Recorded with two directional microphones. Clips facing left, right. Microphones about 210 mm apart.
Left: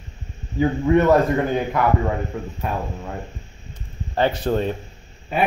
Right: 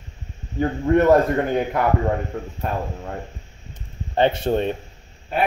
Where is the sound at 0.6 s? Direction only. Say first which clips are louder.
Left 1 dB; 50° right (ahead or behind).